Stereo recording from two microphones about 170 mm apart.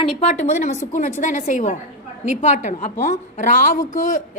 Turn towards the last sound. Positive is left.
turn(degrees=50)  # may be behind; listen again after turning